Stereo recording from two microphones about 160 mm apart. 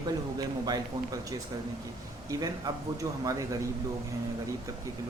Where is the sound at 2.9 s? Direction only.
20° right (ahead or behind).